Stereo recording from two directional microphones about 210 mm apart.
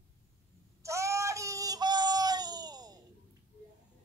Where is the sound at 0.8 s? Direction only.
15° right (ahead or behind).